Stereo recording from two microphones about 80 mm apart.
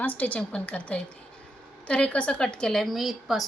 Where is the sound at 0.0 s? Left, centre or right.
Left.